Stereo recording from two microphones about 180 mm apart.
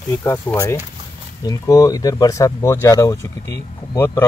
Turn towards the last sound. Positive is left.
turn(degrees=15)  # may be behind; listen again after turning